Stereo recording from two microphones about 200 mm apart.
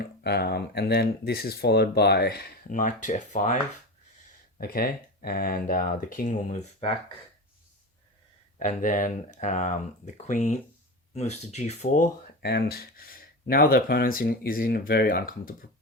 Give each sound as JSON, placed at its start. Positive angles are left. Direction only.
{"t": 0.0, "sound": "speech", "side_deg": 55}
{"t": 8.5, "sound": "speech", "side_deg": 40}
{"t": 12.4, "sound": "speech", "side_deg": 55}